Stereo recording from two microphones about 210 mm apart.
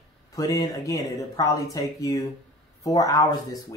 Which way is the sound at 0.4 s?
15° left (ahead or behind).